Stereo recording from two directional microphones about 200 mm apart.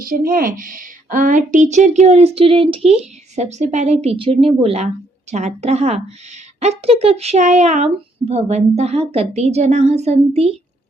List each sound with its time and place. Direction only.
0.0 s a child's voice: 45° right (ahead or behind)